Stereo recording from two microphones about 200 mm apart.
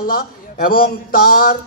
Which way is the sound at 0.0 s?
45° left (ahead or behind).